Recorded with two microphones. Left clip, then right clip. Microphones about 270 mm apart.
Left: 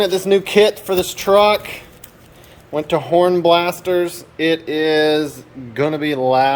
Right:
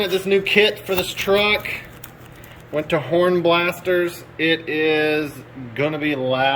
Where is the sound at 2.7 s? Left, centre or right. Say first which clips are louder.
Left 4 dB; centre.